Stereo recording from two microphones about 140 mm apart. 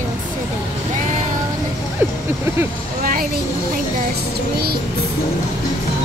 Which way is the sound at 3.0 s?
90° right.